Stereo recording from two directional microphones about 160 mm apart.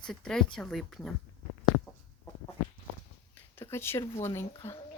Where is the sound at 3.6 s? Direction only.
15° left (ahead or behind).